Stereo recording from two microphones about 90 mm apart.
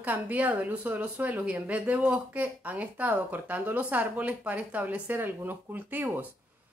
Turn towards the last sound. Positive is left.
turn(degrees=-20)  # may be behind; listen again after turning